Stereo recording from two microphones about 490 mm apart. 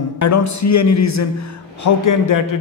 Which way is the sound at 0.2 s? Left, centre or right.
Left.